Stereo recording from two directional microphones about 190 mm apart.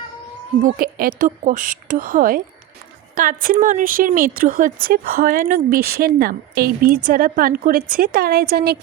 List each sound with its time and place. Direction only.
0.6 s a woman's voice: 50° right (ahead or behind)